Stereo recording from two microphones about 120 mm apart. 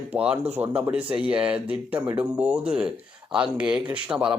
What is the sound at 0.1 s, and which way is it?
A man's voice, 10° right (ahead or behind).